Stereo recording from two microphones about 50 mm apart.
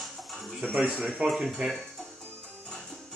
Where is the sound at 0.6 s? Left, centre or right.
Right.